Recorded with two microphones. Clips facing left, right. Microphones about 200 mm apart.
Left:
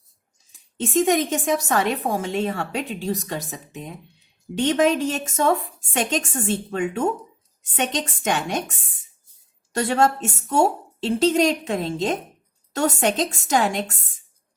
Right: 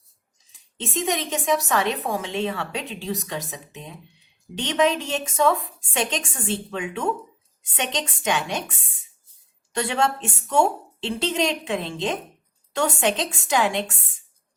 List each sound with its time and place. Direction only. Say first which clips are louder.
0.8 s a woman's voice: left 7 dB; 45° left (ahead or behind)